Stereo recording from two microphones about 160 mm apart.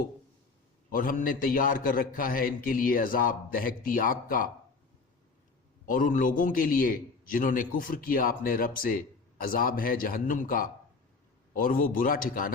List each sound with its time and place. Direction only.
0.9 s a man's voice: 60° left (ahead or behind)
5.8 s a man's voice: 55° left (ahead or behind)